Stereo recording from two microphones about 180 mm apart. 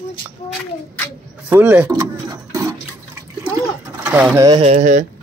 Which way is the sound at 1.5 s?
10° right (ahead or behind).